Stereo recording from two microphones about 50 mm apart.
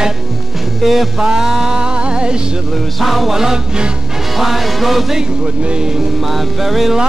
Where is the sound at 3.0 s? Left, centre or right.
Centre.